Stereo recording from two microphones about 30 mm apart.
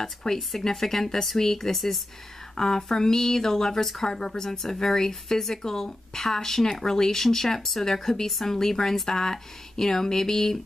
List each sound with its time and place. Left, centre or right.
0.0 s speech: centre
2.5 s a woman's voice: centre